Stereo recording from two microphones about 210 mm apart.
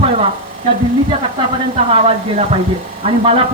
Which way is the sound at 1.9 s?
25° right (ahead or behind).